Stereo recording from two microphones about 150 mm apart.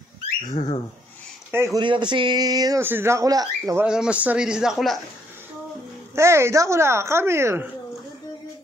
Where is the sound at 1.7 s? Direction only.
30° right (ahead or behind).